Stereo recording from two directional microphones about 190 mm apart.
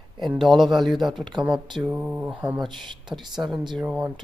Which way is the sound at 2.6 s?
25° right (ahead or behind).